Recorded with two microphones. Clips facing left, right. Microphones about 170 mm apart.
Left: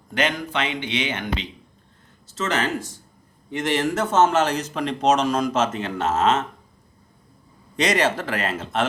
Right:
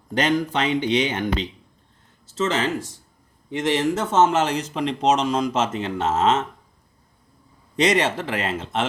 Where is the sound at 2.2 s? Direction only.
25° right (ahead or behind).